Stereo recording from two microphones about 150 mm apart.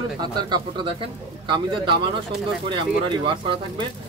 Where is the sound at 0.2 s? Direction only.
30° right (ahead or behind).